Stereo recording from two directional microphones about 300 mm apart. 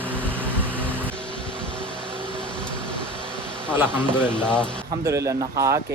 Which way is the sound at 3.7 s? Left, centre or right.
Centre.